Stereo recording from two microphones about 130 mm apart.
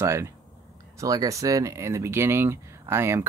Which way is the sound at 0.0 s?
20° right (ahead or behind).